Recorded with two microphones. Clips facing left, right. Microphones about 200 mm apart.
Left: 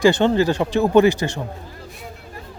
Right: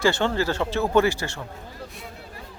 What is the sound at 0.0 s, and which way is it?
Speech, 20° left (ahead or behind).